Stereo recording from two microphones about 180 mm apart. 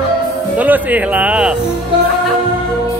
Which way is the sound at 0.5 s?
10° right (ahead or behind).